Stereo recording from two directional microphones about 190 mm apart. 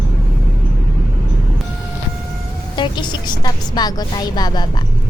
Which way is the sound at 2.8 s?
25° left (ahead or behind).